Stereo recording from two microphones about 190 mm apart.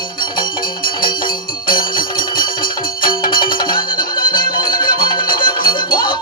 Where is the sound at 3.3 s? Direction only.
25° left (ahead or behind).